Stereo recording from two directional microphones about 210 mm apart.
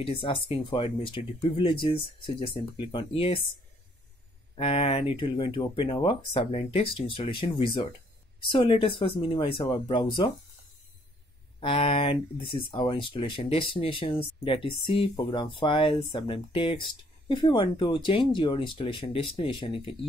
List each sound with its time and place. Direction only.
0.0 s speech: 25° left (ahead or behind)
4.6 s speech: 25° left (ahead or behind)
11.6 s speech: 25° left (ahead or behind)